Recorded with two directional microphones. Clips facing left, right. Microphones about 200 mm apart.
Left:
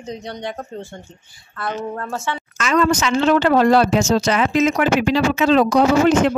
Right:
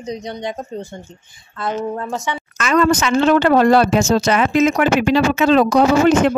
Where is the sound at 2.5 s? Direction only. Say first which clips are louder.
Right 2 dB; 55° right (ahead or behind).